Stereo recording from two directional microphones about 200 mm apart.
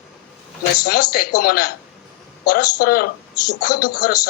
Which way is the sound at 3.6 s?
45° left (ahead or behind).